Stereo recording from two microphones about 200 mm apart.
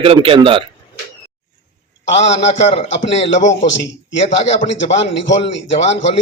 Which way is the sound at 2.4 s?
35° left (ahead or behind).